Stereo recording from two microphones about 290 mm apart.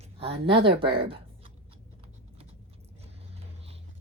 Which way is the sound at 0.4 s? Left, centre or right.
Centre.